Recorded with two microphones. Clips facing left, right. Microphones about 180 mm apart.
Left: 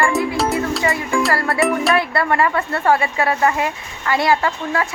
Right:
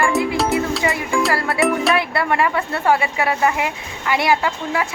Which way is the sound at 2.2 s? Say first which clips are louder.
Left 1 dB; 15° right (ahead or behind).